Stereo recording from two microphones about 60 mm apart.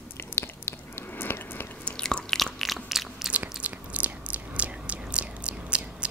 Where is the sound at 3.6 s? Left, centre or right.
Right.